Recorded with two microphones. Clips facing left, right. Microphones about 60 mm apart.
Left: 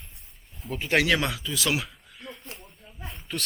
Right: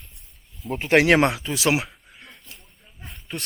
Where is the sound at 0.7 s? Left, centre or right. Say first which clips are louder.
Right 6 dB; right.